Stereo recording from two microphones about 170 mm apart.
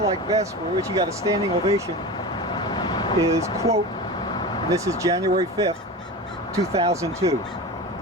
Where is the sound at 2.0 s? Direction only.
25° left (ahead or behind).